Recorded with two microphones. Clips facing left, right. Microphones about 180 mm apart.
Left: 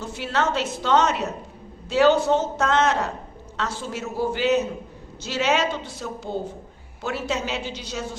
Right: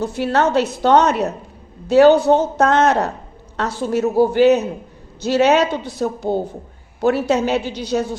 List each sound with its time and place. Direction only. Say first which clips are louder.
0.0 s a man's voice: right 7 dB; 60° right (ahead or behind)